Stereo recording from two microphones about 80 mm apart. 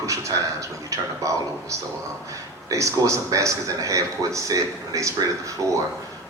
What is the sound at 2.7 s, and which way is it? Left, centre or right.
A man's voice, right.